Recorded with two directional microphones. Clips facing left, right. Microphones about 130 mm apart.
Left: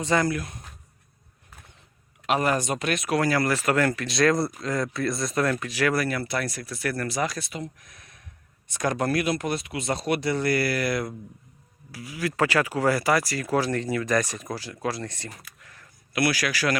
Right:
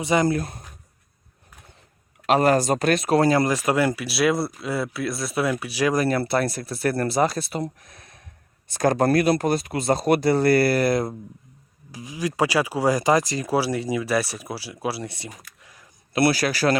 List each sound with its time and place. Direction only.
0.0 s speech: 15° right (ahead or behind)
0.3 s speech: 35° right (ahead or behind)
2.2 s speech: 35° right (ahead or behind); by 6.1 s 15° right (ahead or behind)
6.1 s speech: 30° right (ahead or behind); by 15.9 s 15° right (ahead or behind)
16.1 s speech: 30° right (ahead or behind)